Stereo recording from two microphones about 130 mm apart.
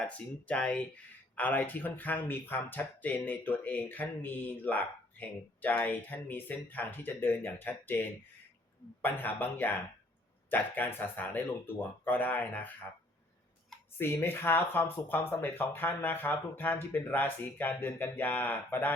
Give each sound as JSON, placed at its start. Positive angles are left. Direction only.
{"t": 0.0, "sound": "speech", "side_deg": 10}
{"t": 14.0, "sound": "speech", "side_deg": 15}